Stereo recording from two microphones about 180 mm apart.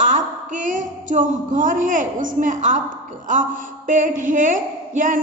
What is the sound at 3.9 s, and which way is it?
A woman's voice, 45° right (ahead or behind).